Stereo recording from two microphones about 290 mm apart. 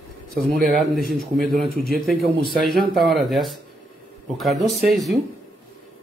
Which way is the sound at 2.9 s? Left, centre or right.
Centre.